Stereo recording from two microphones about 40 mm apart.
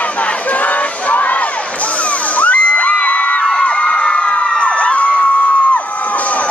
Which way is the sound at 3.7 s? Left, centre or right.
Left.